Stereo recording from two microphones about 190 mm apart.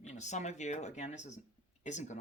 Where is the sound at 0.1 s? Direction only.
40° left (ahead or behind).